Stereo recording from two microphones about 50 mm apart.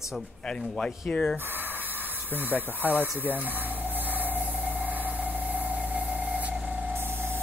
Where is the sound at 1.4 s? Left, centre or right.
Right.